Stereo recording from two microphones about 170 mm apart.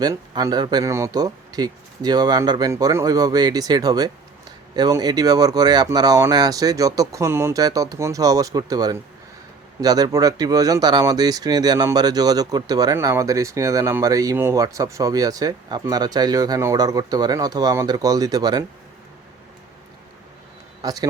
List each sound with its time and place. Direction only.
0.0 s speech: 20° right (ahead or behind)
20.8 s speech: 20° right (ahead or behind)